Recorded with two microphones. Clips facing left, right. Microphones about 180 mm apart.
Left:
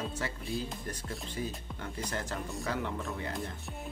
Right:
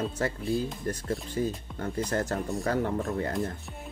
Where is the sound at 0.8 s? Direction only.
45° right (ahead or behind).